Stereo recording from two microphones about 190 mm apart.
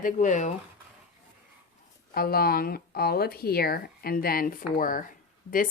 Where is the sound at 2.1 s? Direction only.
50° left (ahead or behind).